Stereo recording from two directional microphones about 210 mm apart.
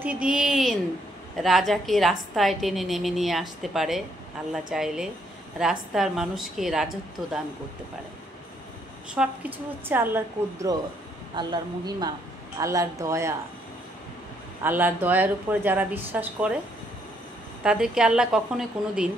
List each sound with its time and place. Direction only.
0.0 s a woman's voice: 5° right (ahead or behind)
9.1 s a woman's voice: 5° right (ahead or behind)
14.6 s a woman's voice: 10° right (ahead or behind)
17.6 s a woman's voice: 5° right (ahead or behind)